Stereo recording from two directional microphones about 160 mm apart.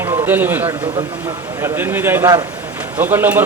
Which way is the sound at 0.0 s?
10° right (ahead or behind).